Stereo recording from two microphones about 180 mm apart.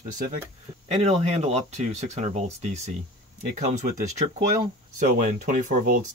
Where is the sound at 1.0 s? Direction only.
35° right (ahead or behind).